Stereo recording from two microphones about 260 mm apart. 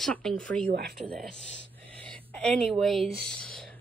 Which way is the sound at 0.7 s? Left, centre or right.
Right.